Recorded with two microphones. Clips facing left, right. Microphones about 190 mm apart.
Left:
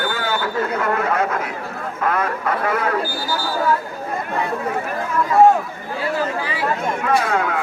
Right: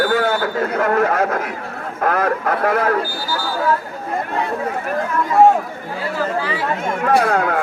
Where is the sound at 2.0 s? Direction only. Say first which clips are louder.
Right 3 dB; 55° right (ahead or behind).